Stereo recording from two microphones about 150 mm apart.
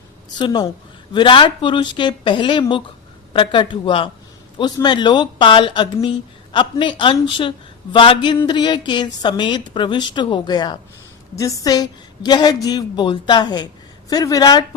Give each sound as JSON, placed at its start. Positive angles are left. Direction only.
{"t": 0.3, "sound": "a woman's voice", "side_deg": 30}